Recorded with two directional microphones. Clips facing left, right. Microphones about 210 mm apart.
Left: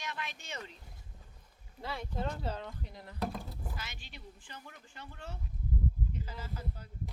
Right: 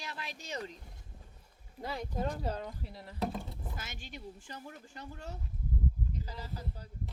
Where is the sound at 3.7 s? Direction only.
45° right (ahead or behind).